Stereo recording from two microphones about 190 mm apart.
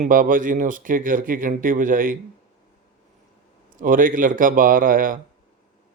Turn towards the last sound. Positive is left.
turn(degrees=-45)  # may be behind; listen again after turning